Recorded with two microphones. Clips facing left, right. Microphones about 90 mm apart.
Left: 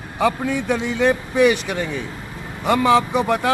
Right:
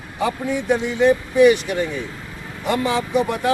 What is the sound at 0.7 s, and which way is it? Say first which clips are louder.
Speech: right 3 dB; 90° left.